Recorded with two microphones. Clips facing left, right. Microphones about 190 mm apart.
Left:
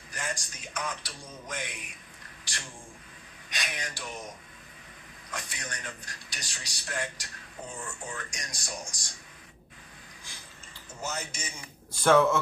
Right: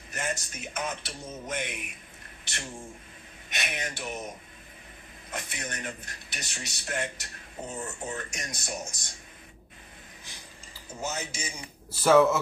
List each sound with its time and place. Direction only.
0.1 s a man's voice: 25° right (ahead or behind)
5.3 s a man's voice: 20° right (ahead or behind)
11.1 s a man's voice: 10° right (ahead or behind)